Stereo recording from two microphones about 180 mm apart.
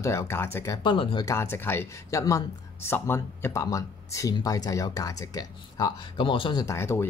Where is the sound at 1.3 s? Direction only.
15° left (ahead or behind).